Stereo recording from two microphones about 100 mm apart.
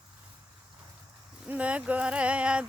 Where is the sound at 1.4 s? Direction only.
15° right (ahead or behind).